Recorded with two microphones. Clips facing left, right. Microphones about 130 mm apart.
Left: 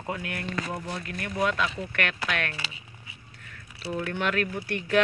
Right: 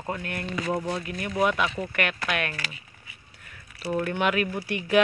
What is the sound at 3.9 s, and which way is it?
Speech, 10° right (ahead or behind).